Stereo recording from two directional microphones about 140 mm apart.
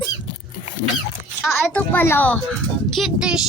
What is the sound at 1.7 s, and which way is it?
A child's voice, 10° left (ahead or behind).